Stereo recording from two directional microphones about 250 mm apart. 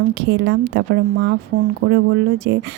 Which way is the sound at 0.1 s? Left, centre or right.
Right.